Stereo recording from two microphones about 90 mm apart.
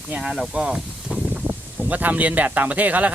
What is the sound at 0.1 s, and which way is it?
Speech, 5° right (ahead or behind).